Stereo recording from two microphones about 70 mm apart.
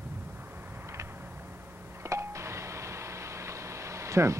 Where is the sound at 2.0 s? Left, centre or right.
Right.